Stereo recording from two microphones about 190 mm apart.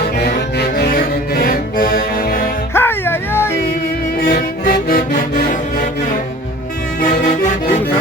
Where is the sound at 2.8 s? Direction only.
10° left (ahead or behind).